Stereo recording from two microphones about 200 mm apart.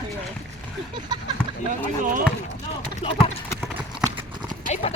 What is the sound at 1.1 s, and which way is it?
Speech, 20° right (ahead or behind).